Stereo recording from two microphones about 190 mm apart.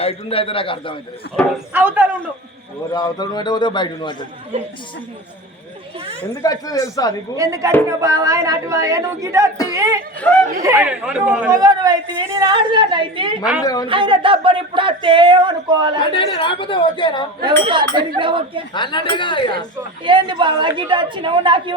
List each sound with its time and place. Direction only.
0.0 s a man's voice: 30° left (ahead or behind)
1.7 s speech: 10° right (ahead or behind)
2.9 s a man's voice: 20° left (ahead or behind)
6.4 s a man's voice: 20° left (ahead or behind)
7.3 s speech: 15° right (ahead or behind)
10.2 s speech: 10° left (ahead or behind)
10.6 s speech: 15° right (ahead or behind)
11.5 s speech: 20° right (ahead or behind)
13.4 s a woman's voice: 5° right (ahead or behind)
13.8 s speech: 25° right (ahead or behind)
16.1 s a man's voice: 25° left (ahead or behind)
17.4 s speech: 25° right (ahead or behind)
18.7 s a man's voice: 25° left (ahead or behind)
20.1 s speech: 25° right (ahead or behind)